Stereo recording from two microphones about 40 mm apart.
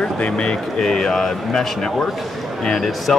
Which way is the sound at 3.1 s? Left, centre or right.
Centre.